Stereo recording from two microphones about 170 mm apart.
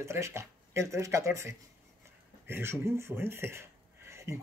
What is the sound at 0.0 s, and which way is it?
A man's voice, 15° right (ahead or behind).